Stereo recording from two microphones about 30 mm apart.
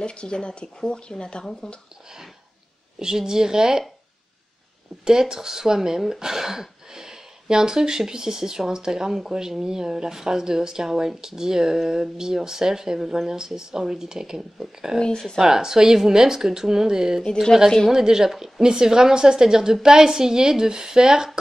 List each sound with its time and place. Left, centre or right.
0.0 s speech: left
3.0 s speech: right
5.0 s speech: right
15.0 s speech: centre
15.4 s speech: centre